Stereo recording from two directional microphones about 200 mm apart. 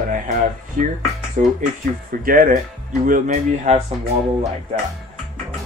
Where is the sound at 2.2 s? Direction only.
45° right (ahead or behind).